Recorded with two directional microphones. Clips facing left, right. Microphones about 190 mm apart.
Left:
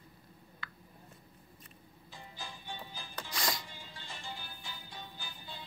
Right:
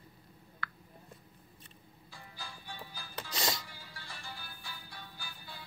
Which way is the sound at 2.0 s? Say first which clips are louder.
Left 2 dB; 20° left (ahead or behind).